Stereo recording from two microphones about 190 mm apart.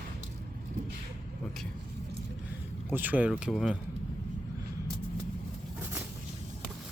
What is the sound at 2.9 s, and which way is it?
Speech, 10° right (ahead or behind).